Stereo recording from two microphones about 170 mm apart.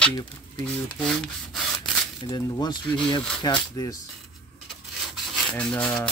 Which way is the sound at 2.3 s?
25° left (ahead or behind).